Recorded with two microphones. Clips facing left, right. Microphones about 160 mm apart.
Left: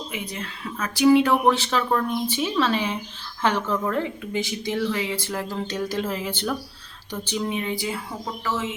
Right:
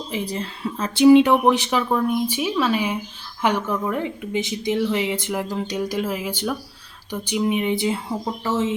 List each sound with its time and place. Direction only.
0.1 s speech: 35° right (ahead or behind)